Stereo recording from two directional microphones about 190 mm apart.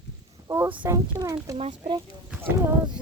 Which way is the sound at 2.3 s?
10° right (ahead or behind).